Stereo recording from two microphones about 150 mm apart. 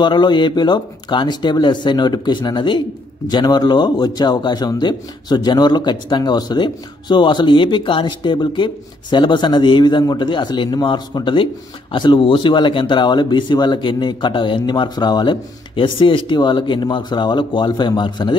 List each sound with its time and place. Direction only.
0.0 s a man's voice: 30° left (ahead or behind)